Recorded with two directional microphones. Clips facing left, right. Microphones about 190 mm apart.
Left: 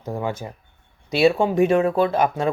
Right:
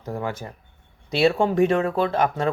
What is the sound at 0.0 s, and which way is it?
Speech, 20° left (ahead or behind).